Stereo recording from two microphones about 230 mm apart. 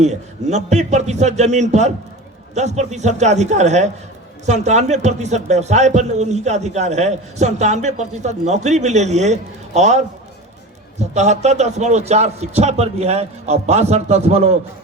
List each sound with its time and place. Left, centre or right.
0.0 s a man's voice: right
11.0 s a man's voice: right